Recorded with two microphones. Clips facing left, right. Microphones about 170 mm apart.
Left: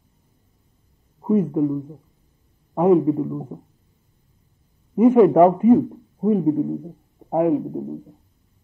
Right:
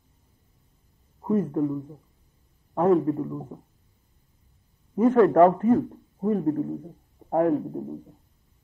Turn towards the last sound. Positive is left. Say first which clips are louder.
# left 4 dB
turn(degrees=10)  # may be behind; listen again after turning